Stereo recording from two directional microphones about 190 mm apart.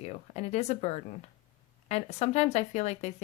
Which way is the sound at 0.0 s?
35° left (ahead or behind).